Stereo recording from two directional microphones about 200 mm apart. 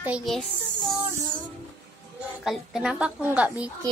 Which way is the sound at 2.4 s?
Centre (ahead or behind).